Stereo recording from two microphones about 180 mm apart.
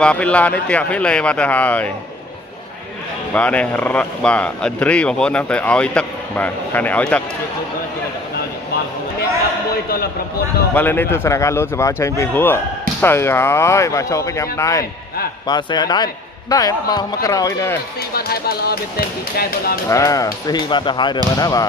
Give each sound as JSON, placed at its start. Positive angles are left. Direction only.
{"t": 0.0, "sound": "a man's voice", "side_deg": 5}
{"t": 3.3, "sound": "a man's voice", "side_deg": 5}
{"t": 10.7, "sound": "a man's voice", "side_deg": 10}
{"t": 18.1, "sound": "speech", "side_deg": 60}
{"t": 19.9, "sound": "a man's voice", "side_deg": 20}